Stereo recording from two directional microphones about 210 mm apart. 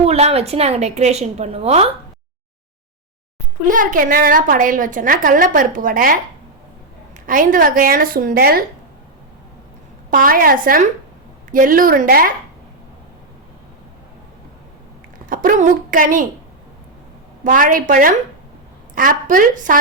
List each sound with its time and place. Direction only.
0.0 s a woman's voice: 30° right (ahead or behind)
3.7 s a woman's voice: 40° right (ahead or behind)
7.3 s a woman's voice: 40° right (ahead or behind)
10.1 s a woman's voice: 40° right (ahead or behind)
15.3 s a woman's voice: 40° right (ahead or behind)
17.4 s a woman's voice: 40° right (ahead or behind)